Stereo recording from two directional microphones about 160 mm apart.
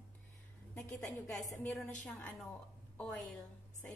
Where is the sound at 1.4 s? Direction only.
15° left (ahead or behind).